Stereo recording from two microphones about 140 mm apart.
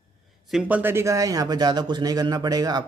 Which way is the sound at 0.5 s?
10° right (ahead or behind).